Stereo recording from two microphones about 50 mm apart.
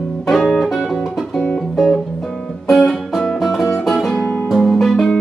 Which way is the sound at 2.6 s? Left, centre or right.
Centre.